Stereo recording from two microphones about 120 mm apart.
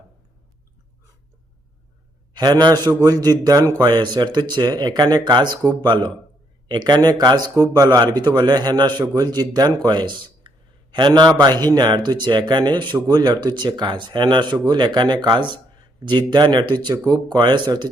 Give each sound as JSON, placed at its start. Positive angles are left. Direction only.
{"t": 2.3, "sound": "speech", "side_deg": -35}